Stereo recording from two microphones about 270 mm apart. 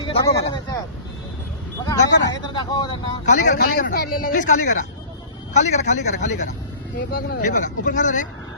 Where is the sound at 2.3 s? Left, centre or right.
Centre.